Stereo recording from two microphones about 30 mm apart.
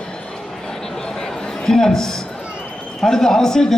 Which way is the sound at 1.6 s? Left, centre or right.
Centre.